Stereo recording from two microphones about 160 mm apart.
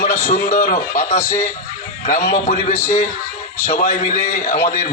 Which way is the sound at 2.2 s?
55° left (ahead or behind).